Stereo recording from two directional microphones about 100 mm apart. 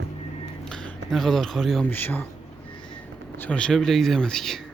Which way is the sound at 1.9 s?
20° left (ahead or behind).